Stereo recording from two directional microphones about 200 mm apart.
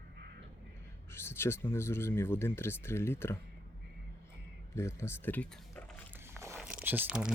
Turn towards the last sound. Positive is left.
turn(degrees=-5)  # may be behind; listen again after turning